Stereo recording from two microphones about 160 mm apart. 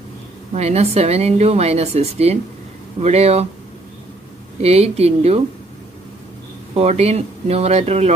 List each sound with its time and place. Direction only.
0.6 s a woman's voice: 40° right (ahead or behind)
4.6 s a woman's voice: 40° right (ahead or behind)
6.7 s a woman's voice: 40° right (ahead or behind)